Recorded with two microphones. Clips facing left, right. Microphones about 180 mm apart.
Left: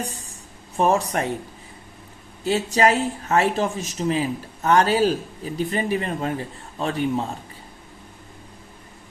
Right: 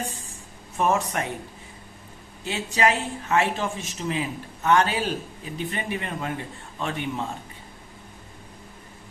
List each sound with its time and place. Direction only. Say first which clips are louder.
0.8 s speech: left 4 dB; 35° left (ahead or behind)
2.4 s speech: left 5 dB; 40° left (ahead or behind)